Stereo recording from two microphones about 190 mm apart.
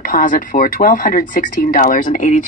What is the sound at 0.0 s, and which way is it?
Speech, 45° left (ahead or behind).